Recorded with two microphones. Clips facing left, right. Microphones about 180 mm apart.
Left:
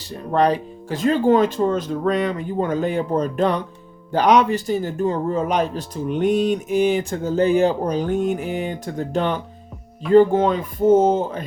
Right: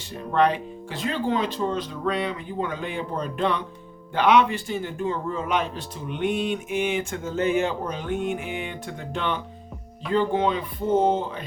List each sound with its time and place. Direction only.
0.3 s speech: 35° left (ahead or behind)